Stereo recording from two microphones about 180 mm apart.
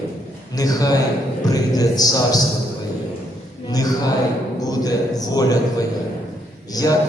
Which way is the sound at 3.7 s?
20° left (ahead or behind).